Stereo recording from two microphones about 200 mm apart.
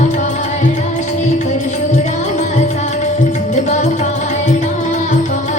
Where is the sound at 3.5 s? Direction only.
35° left (ahead or behind).